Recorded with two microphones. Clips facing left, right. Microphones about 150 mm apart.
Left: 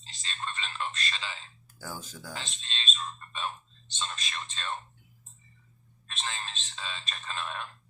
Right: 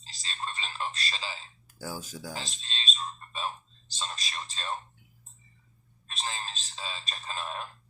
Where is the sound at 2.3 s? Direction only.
35° right (ahead or behind).